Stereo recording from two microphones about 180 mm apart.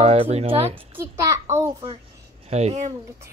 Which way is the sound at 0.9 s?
15° right (ahead or behind).